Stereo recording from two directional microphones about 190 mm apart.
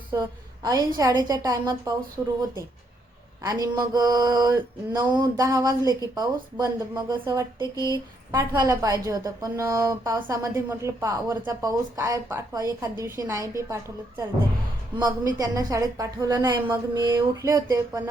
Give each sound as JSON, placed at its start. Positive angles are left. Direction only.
{"t": 0.1, "sound": "speech", "side_deg": -20}
{"t": 3.4, "sound": "a woman's voice", "side_deg": -20}
{"t": 14.9, "sound": "a woman's voice", "side_deg": -20}